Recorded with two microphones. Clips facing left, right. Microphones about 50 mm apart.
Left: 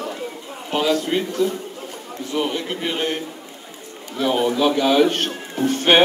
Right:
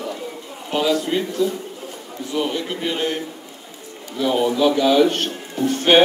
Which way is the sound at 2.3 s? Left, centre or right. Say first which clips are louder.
Even; centre.